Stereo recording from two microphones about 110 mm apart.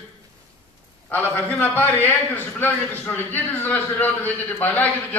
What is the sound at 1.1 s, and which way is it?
A man's voice, 15° left (ahead or behind).